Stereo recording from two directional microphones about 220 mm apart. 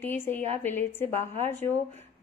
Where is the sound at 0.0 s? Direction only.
10° left (ahead or behind).